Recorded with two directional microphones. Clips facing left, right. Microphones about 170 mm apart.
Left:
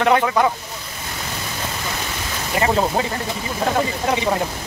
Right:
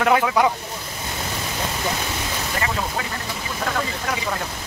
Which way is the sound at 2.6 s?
30° left (ahead or behind).